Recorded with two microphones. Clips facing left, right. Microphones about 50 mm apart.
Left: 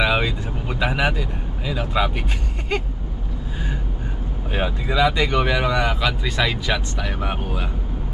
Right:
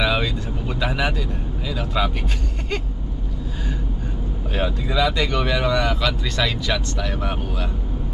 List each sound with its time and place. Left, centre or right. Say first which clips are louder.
0.0 s vehicle: left 1 dB; centre
1.6 s speech: left 2 dB; centre
4.5 s speech: left 1 dB; centre